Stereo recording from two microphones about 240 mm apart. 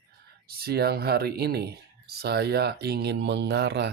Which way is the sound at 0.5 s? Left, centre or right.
Right.